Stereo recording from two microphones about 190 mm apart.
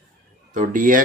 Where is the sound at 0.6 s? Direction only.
45° right (ahead or behind).